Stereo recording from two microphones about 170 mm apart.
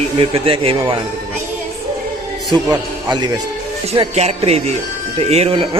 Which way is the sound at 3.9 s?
35° right (ahead or behind).